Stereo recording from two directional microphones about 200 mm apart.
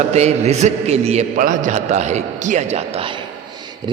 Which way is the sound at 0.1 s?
35° right (ahead or behind).